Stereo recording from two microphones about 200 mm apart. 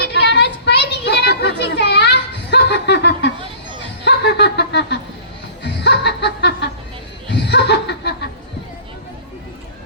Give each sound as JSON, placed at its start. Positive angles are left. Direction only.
{"t": 0.0, "sound": "a sound", "side_deg": 60}
{"t": 5.6, "sound": "music", "side_deg": 60}
{"t": 7.3, "sound": "chuckle", "side_deg": 60}